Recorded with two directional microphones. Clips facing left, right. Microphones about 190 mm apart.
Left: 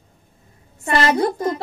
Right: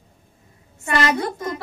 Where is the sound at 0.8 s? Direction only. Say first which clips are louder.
Left 3 dB; 35° left (ahead or behind).